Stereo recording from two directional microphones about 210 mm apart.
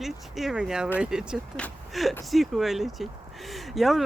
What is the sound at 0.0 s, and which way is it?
Speech, centre (ahead or behind).